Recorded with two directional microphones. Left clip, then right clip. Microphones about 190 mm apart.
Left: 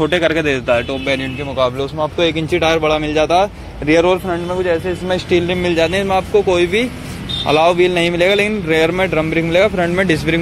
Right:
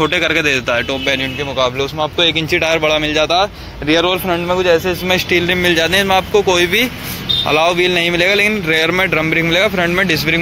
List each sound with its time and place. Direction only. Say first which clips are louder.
0.0 s speech: right 1 dB; 10° left (ahead or behind)
1.8 s speech: right 1 dB; 15° left (ahead or behind)
3.3 s speech: left 1 dB; 20° left (ahead or behind)
4.3 s speech: right 4 dB; 15° right (ahead or behind)
5.1 s speech: right 2 dB; 5° left (ahead or behind)